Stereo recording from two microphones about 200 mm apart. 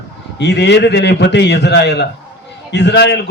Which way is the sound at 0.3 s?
60° left (ahead or behind).